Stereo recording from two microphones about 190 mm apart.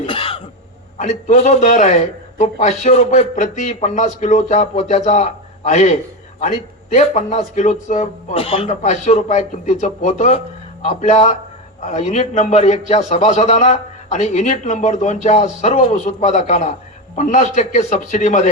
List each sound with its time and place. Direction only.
0.0 s cough: 30° left (ahead or behind)
0.9 s a man's voice: 35° left (ahead or behind)